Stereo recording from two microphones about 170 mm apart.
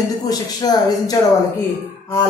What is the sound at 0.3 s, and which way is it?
Speech, 25° left (ahead or behind).